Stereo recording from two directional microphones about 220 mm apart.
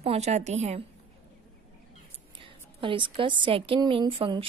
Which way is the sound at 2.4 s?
25° right (ahead or behind).